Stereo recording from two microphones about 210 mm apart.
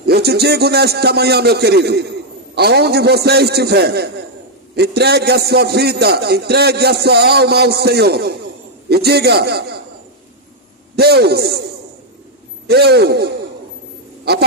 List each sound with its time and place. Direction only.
0.0 s a man's voice: 50° right (ahead or behind)
10.9 s a man's voice: 50° right (ahead or behind)
12.6 s a man's voice: 50° right (ahead or behind)